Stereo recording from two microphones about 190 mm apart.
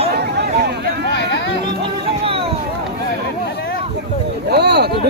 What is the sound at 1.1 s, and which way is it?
Speech, 70° left (ahead or behind).